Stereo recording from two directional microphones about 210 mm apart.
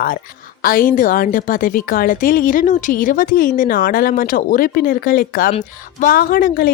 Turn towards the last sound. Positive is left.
turn(degrees=45)  # may be behind; listen again after turning